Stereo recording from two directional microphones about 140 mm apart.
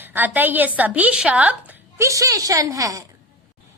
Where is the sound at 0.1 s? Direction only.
15° right (ahead or behind).